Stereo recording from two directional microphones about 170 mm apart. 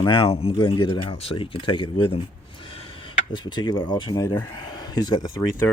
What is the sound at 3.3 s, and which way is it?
Speech, 25° left (ahead or behind).